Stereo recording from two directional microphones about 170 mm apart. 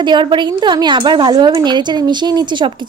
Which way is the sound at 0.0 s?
25° right (ahead or behind).